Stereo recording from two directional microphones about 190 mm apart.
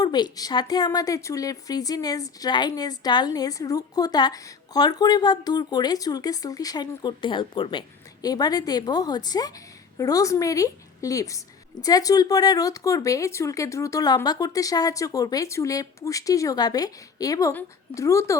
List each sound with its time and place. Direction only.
0.0 s a woman's voice: 20° left (ahead or behind)